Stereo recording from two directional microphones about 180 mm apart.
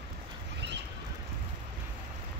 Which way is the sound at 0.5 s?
75° right (ahead or behind).